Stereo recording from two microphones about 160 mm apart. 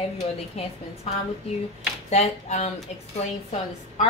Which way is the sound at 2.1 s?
45° left (ahead or behind).